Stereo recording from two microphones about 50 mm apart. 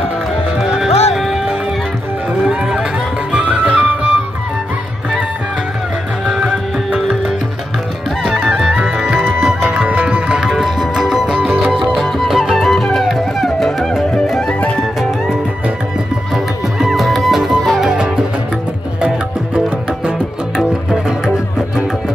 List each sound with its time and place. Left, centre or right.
0.7 s music: centre
3.3 s music: right
8.5 s music: centre
10.5 s music: centre
16.3 s music: centre
20.1 s music: centre